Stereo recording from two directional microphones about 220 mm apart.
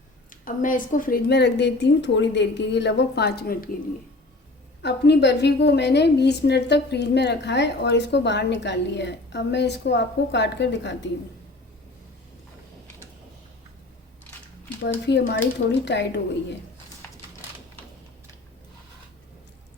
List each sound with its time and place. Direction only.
0.3 s a woman's voice: 35° left (ahead or behind)
4.8 s a woman's voice: 50° left (ahead or behind)
15.0 s a woman's voice: 50° left (ahead or behind)